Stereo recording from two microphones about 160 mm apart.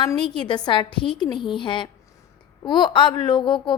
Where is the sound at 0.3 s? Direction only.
30° left (ahead or behind).